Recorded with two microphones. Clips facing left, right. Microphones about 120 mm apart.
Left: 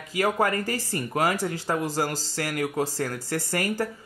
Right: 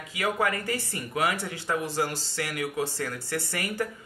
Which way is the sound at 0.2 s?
40° left (ahead or behind).